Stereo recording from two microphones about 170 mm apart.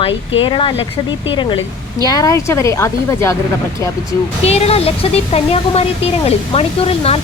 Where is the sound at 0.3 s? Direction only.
30° left (ahead or behind).